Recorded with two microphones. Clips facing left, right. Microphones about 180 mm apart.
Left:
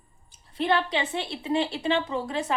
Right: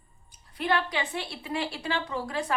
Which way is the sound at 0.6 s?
25° left (ahead or behind).